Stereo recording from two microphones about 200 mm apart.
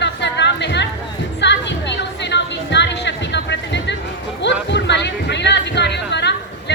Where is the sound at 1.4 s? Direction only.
60° left (ahead or behind).